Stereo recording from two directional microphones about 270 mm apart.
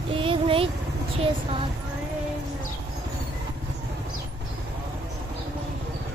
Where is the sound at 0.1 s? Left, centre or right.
Centre.